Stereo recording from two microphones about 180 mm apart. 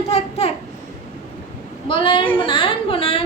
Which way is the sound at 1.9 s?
30° left (ahead or behind).